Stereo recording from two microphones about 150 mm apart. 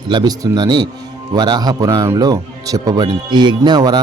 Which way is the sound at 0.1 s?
30° right (ahead or behind).